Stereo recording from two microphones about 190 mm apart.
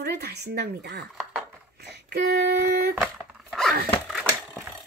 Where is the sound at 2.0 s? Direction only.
60° right (ahead or behind).